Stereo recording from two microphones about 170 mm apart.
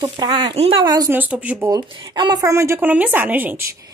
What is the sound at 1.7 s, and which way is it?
A woman's voice, 25° right (ahead or behind).